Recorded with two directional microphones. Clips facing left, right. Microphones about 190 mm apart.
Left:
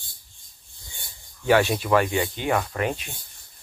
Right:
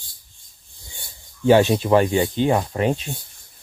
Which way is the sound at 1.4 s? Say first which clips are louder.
Right 5 dB; 25° right (ahead or behind).